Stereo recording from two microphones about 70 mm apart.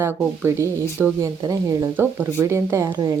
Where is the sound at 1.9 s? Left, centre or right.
Right.